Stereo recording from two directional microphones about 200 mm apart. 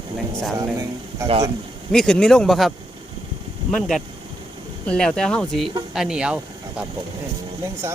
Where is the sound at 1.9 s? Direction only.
5° left (ahead or behind).